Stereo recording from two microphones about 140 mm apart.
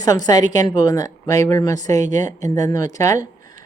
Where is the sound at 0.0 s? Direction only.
25° left (ahead or behind).